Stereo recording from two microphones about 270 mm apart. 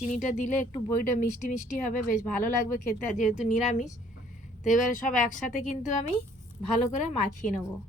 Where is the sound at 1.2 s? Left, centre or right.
Left.